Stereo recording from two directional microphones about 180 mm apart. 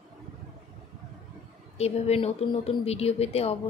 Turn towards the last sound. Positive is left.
turn(degrees=35)  # may be behind; listen again after turning